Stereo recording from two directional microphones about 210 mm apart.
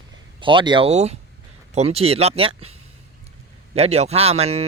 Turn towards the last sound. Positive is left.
turn(degrees=-30)  # may be behind; listen again after turning